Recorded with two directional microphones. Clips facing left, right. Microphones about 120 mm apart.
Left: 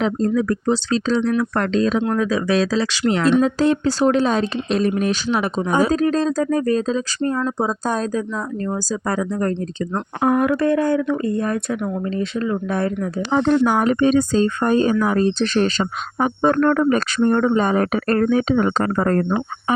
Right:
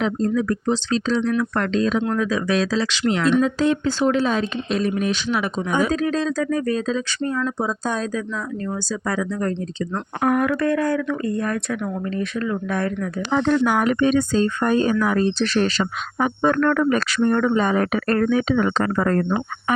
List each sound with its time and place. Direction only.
0.0 s speech: 35° left (ahead or behind)
9.9 s speech: 25° left (ahead or behind); by 19.2 s 40° left (ahead or behind)